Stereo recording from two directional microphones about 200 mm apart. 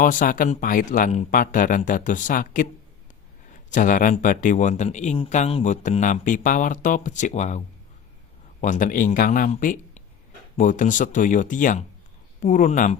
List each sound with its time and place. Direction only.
0.0 s speech: 40° left (ahead or behind)
8.6 s speech: 40° left (ahead or behind)